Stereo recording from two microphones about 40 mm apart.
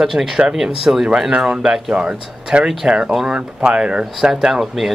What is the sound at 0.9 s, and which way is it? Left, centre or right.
Speech, right.